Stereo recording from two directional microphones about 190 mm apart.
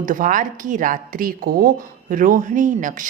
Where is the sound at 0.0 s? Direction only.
45° right (ahead or behind).